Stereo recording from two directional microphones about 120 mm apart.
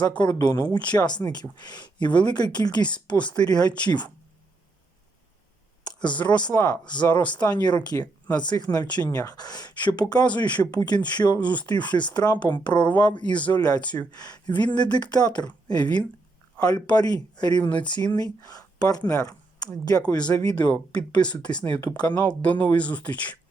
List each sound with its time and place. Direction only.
0.2 s speech: 35° left (ahead or behind)
6.2 s speech: 40° left (ahead or behind)
11.3 s speech: 10° left (ahead or behind)
11.6 s speech: 40° left (ahead or behind)
13.2 s speech: 10° left (ahead or behind)
13.5 s speech: 35° left (ahead or behind)
19.1 s a sound: 30° left (ahead or behind)
20.3 s speech: 35° left (ahead or behind)
20.6 s speech: 15° left (ahead or behind)
21.3 s speech: 35° left (ahead or behind)
22.2 s speech: 10° left (ahead or behind)